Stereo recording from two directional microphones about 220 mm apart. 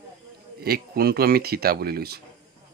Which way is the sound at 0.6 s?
45° right (ahead or behind).